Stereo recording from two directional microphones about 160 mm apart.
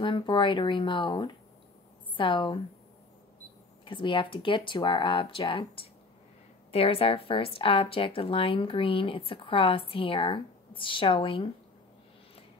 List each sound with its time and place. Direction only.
0.0 s speech: 30° left (ahead or behind)
3.8 s speech: 30° left (ahead or behind)